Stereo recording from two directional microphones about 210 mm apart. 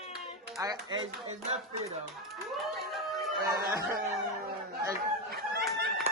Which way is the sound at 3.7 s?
15° right (ahead or behind).